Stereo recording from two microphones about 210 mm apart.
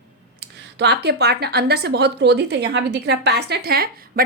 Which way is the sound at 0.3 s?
50° right (ahead or behind).